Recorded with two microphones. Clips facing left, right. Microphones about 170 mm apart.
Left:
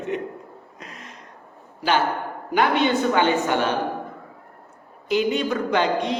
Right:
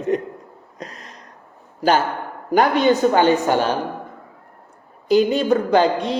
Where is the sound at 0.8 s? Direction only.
35° right (ahead or behind).